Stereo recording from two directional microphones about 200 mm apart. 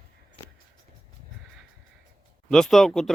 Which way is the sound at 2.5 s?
Centre (ahead or behind).